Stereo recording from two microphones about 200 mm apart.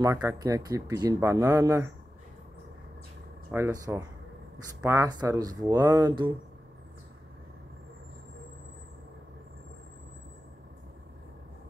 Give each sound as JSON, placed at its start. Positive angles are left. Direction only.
{"t": 0.0, "sound": "speech", "side_deg": -15}
{"t": 3.5, "sound": "speech", "side_deg": -15}